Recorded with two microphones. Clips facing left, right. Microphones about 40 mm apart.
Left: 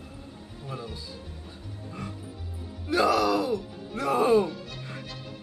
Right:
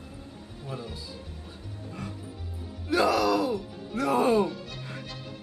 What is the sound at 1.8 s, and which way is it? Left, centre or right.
Music, centre.